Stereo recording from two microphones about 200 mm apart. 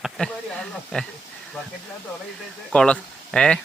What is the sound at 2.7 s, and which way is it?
Speech, 5° left (ahead or behind).